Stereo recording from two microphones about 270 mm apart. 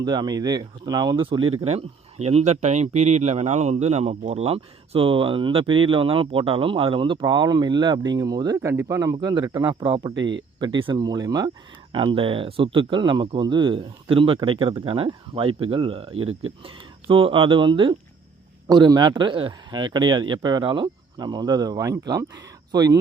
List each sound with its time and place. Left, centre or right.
0.0 s speech: centre